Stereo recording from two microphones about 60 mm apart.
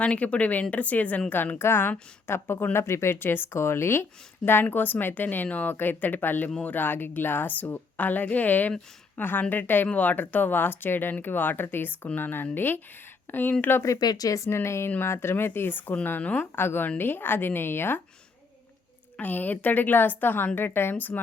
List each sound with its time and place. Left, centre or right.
0.0 s a woman's voice: left
4.6 s a woman's voice: left
13.8 s speech: left
16.6 s speech: left
19.2 s speech: left